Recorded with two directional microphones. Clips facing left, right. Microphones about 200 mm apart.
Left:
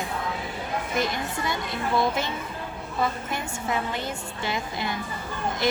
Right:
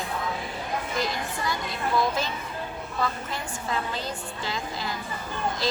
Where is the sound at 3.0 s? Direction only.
20° left (ahead or behind).